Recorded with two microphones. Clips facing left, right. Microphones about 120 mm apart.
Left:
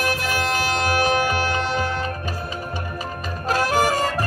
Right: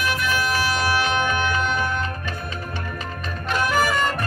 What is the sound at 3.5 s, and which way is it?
Music, 40° left (ahead or behind).